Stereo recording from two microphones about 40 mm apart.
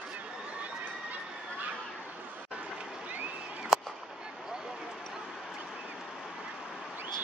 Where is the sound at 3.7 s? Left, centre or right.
Centre.